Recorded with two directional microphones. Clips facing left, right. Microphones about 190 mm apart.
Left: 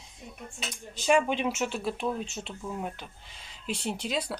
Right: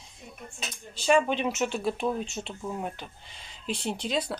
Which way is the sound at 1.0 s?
10° left (ahead or behind).